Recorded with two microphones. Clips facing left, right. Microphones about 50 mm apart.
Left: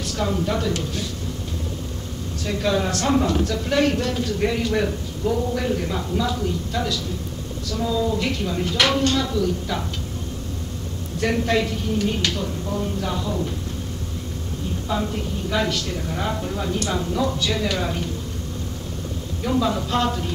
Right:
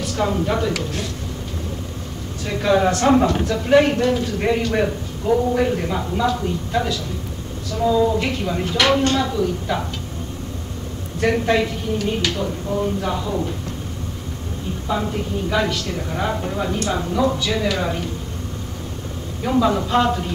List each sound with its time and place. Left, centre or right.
0.1 s a man's voice: centre
2.4 s a man's voice: right
11.1 s speech: centre
12.0 s speech: centre
12.4 s speech: centre
14.9 s speech: centre
19.4 s speech: centre